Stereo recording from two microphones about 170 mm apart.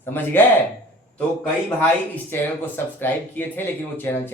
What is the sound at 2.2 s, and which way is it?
Speech, 10° left (ahead or behind).